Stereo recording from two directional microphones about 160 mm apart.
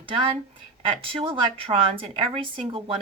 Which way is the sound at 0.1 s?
30° right (ahead or behind).